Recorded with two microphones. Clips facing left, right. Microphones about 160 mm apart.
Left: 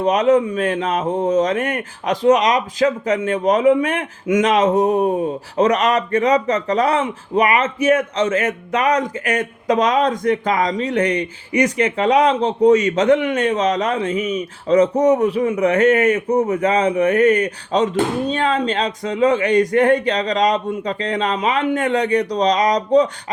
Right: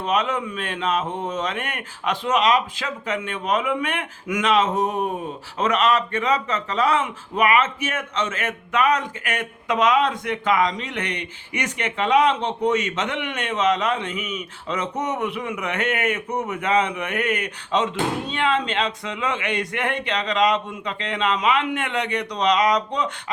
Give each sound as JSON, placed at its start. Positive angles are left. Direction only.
{"t": 0.0, "sound": "a man's voice", "side_deg": 40}